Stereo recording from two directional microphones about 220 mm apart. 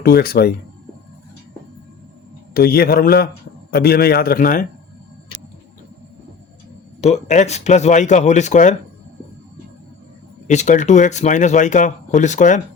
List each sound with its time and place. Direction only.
0.0 s a man's voice: 45° left (ahead or behind)
2.5 s a man's voice: 40° left (ahead or behind)
7.0 s speech: 30° left (ahead or behind)
10.4 s speech: 35° left (ahead or behind)